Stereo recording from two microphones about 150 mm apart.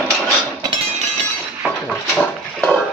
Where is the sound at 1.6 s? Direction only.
10° left (ahead or behind).